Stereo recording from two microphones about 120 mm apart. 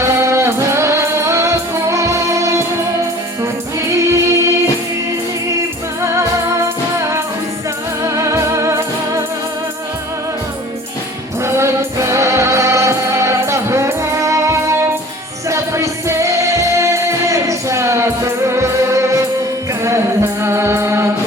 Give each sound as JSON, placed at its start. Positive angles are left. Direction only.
{"t": 0.0, "sound": "music", "side_deg": -25}
{"t": 3.8, "sound": "music", "side_deg": -25}
{"t": 8.0, "sound": "music", "side_deg": -25}
{"t": 11.4, "sound": "music", "side_deg": -25}